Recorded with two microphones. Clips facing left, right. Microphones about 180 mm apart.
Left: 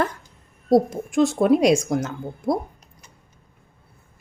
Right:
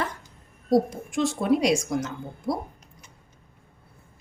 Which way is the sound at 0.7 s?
50° left (ahead or behind).